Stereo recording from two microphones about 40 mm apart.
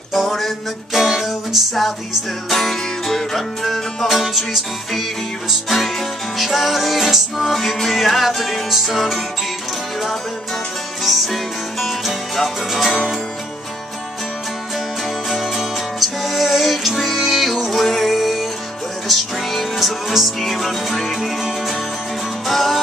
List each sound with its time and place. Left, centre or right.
0.1 s music: centre
5.7 s music: centre
11.0 s music: centre
12.9 s music: centre
15.2 s music: centre